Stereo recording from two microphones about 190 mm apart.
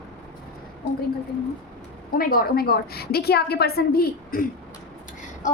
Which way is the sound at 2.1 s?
50° left (ahead or behind).